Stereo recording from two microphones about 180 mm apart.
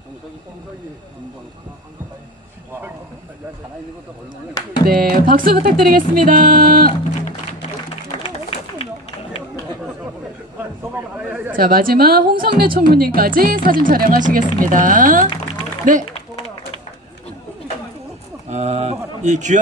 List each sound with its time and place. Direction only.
4.8 s a woman's voice: 55° right (ahead or behind)
8.2 s a sound: 35° left (ahead or behind)
11.1 s chatter: 5° right (ahead or behind)
11.5 s a woman's voice: 55° right (ahead or behind)
16.1 s run: 30° left (ahead or behind)
18.5 s a sound: 40° right (ahead or behind)